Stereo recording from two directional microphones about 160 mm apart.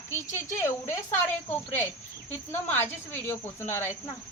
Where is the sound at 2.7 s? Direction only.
15° left (ahead or behind).